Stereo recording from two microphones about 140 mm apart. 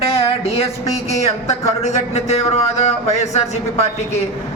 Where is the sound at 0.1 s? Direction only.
45° left (ahead or behind).